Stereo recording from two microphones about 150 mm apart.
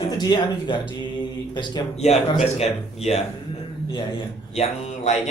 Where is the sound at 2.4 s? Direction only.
45° left (ahead or behind).